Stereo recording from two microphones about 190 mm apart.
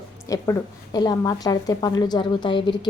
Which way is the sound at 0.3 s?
15° left (ahead or behind).